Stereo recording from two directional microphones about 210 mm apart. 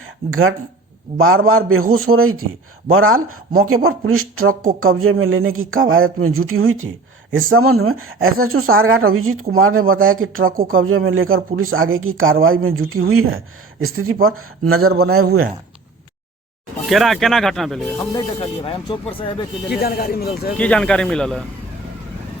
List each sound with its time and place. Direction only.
0.0 s speech: 80° right
2.9 s speech: 80° right
3.2 s speech: 90° right
10.5 s speech: 45° right (ahead or behind)
10.8 s speech: 75° right (ahead or behind)
13.8 s speech: 90° right
16.9 s speech: centre (ahead or behind)
18.3 s speech: 25° left (ahead or behind)
19.8 s speech: 45° left (ahead or behind)
20.6 s speech: 5° left (ahead or behind)